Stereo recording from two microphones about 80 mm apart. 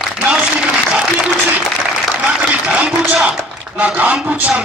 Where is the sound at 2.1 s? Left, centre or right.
Centre.